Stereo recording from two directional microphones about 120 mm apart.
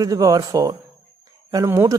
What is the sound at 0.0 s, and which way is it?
Speech, 30° right (ahead or behind).